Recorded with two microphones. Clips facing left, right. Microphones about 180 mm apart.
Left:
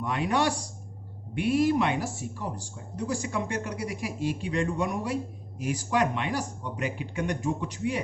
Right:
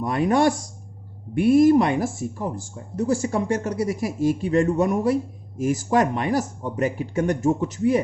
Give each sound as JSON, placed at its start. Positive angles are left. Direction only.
{"t": 0.0, "sound": "speech", "side_deg": -45}